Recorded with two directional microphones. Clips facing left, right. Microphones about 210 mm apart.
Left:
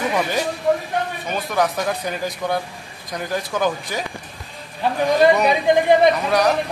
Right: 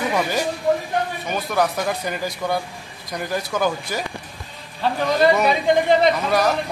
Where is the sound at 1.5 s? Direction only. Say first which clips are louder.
Even; 5° right (ahead or behind).